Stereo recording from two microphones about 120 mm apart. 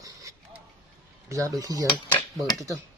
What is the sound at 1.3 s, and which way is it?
Speech, 30° right (ahead or behind).